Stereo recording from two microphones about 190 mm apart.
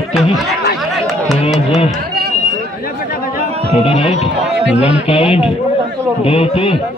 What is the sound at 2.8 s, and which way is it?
Chatter, 50° left (ahead or behind).